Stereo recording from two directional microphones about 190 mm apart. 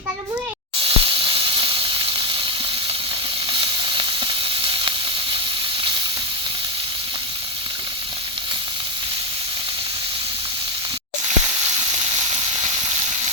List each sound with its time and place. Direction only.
0.8 s hiss: 30° right (ahead or behind)
3.5 s sizzle: 25° right (ahead or behind)